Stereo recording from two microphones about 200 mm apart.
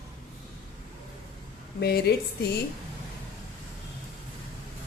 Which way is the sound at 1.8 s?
50° left (ahead or behind).